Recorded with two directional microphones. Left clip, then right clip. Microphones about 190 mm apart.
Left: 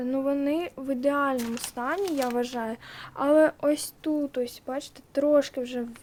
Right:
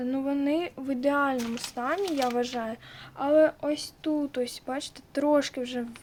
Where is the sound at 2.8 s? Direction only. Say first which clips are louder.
Left 3 dB; 25° left (ahead or behind).